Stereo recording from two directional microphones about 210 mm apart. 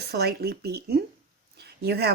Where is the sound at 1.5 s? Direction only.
50° right (ahead or behind).